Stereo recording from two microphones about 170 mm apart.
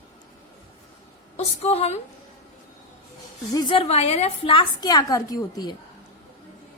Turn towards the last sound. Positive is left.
turn(degrees=20)  # may be behind; listen again after turning